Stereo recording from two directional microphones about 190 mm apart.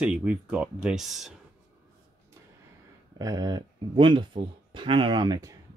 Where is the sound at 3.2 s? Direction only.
20° right (ahead or behind).